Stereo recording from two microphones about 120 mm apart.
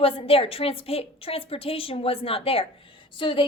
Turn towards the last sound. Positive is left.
turn(degrees=45)  # may be behind; listen again after turning